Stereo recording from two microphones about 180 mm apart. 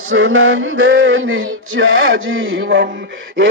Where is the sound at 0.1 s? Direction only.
90° right.